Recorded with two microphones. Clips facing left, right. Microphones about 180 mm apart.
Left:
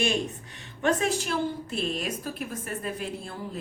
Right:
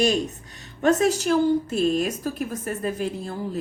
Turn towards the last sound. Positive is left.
turn(degrees=-40)  # may be behind; listen again after turning